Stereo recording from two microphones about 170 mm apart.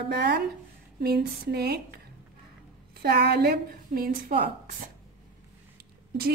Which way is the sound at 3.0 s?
70° right (ahead or behind).